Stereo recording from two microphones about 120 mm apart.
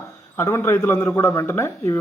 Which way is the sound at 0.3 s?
20° left (ahead or behind).